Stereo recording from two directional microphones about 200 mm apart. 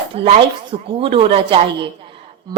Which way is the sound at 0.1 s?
25° right (ahead or behind).